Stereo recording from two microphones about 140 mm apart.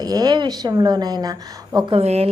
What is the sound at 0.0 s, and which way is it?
A woman's voice, 25° right (ahead or behind).